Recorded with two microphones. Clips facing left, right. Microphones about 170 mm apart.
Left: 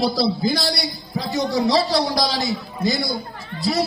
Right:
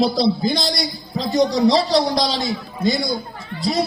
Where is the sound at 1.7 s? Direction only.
25° right (ahead or behind).